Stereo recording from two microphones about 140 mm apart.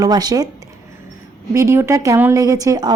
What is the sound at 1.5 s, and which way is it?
A woman's voice, 20° right (ahead or behind).